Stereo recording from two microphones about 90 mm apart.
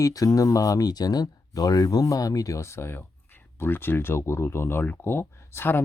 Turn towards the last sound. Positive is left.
turn(degrees=25)  # may be behind; listen again after turning